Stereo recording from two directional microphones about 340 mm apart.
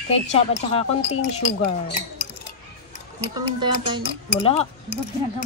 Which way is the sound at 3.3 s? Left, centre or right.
Centre.